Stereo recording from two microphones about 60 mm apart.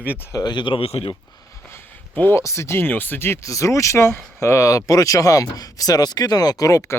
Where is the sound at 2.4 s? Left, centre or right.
Left.